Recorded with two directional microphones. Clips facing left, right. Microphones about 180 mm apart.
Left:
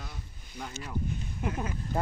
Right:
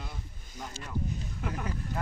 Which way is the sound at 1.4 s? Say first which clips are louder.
Left 4 dB; 25° left (ahead or behind).